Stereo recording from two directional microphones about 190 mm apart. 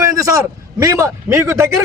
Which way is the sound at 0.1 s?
20° right (ahead or behind).